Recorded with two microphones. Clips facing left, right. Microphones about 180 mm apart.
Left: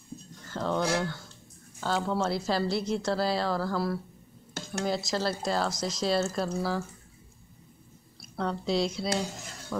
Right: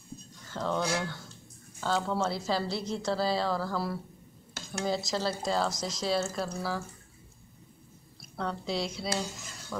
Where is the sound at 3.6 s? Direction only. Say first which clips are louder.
Left 3 dB; 5° right (ahead or behind).